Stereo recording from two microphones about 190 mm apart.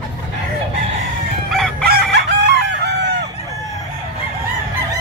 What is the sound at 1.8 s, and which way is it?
Chicken, 60° right (ahead or behind).